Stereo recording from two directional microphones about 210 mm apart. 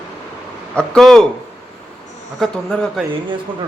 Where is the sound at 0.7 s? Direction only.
5° left (ahead or behind).